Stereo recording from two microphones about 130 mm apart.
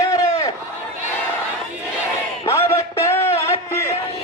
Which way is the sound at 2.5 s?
20° left (ahead or behind).